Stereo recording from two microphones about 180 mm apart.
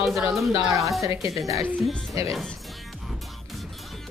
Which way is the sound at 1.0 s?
20° right (ahead or behind).